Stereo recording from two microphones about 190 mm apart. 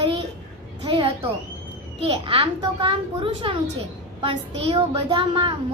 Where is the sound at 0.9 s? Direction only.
25° right (ahead or behind).